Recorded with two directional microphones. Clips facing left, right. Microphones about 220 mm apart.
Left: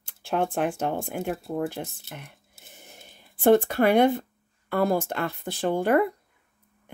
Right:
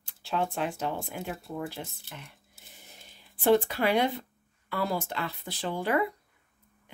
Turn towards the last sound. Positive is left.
turn(degrees=50)  # may be behind; listen again after turning